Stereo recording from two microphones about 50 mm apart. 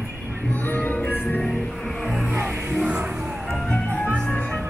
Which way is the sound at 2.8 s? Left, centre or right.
Right.